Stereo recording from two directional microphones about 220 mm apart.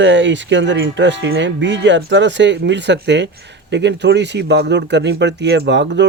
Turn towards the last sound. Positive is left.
turn(degrees=-55)  # may be behind; listen again after turning